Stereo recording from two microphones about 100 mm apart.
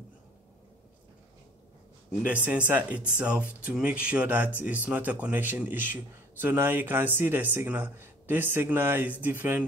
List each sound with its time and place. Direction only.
2.2 s a man's voice: 15° right (ahead or behind)